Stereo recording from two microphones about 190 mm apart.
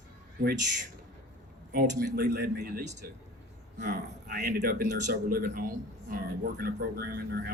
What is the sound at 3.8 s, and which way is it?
A man's voice, 60° right (ahead or behind).